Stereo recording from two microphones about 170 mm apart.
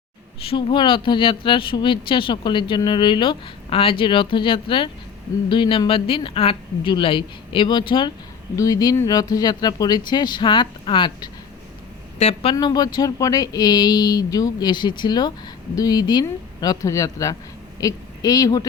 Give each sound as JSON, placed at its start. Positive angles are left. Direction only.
{"t": 0.4, "sound": "speech", "side_deg": 30}
{"t": 12.5, "sound": "speech", "side_deg": 25}